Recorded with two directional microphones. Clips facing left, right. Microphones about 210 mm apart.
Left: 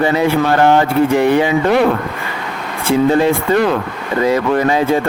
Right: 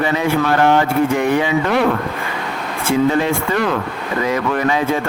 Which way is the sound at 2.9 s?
30° left (ahead or behind).